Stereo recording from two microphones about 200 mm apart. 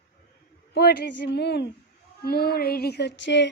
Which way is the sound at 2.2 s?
50° left (ahead or behind).